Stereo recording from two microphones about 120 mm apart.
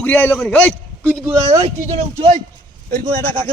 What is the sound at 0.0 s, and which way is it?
Speech, 15° left (ahead or behind).